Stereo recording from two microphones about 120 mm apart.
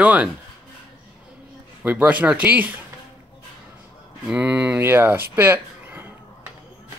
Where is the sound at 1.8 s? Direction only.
15° right (ahead or behind).